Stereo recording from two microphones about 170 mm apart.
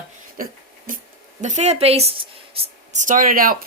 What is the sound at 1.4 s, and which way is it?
Speech, 45° right (ahead or behind).